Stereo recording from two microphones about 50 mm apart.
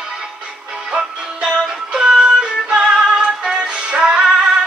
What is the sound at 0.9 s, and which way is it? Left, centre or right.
Music, centre.